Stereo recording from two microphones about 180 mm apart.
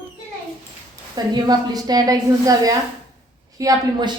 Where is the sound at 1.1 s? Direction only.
25° right (ahead or behind).